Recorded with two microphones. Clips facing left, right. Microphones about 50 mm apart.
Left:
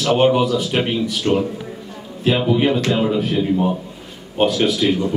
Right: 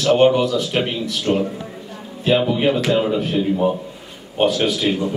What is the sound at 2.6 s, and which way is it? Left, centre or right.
Speech, centre.